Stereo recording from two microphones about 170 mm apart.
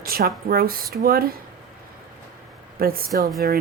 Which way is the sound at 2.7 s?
60° right (ahead or behind).